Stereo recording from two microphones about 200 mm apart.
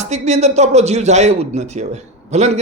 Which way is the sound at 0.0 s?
35° right (ahead or behind).